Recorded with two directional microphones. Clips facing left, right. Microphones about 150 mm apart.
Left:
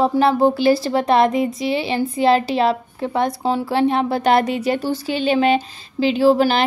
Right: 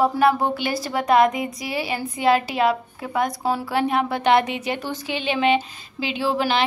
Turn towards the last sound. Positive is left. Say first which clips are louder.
# left 7 dB
turn(degrees=40)  # may be behind; listen again after turning